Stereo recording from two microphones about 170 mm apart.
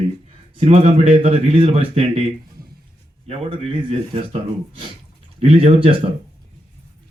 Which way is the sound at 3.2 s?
35° right (ahead or behind).